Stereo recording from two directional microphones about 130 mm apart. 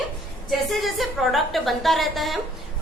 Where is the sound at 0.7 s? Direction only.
Centre (ahead or behind).